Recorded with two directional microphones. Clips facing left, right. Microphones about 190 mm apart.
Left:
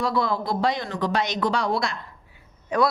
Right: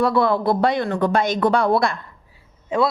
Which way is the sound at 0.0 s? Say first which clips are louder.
Right 7 dB; 60° right (ahead or behind).